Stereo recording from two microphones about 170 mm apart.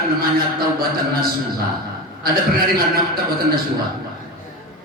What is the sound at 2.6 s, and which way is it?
A man's voice, 60° right (ahead or behind).